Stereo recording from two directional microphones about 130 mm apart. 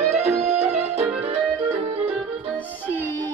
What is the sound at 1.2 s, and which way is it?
Music, 45° right (ahead or behind).